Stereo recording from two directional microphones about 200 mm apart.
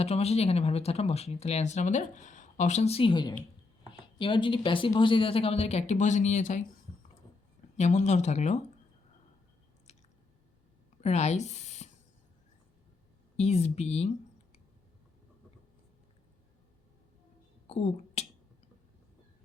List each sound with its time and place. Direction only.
0.0 s speech: 30° left (ahead or behind)
7.8 s speech: 35° left (ahead or behind)
11.0 s speech: 35° left (ahead or behind)
13.3 s speech: 30° left (ahead or behind)
17.7 s a sound: 30° left (ahead or behind)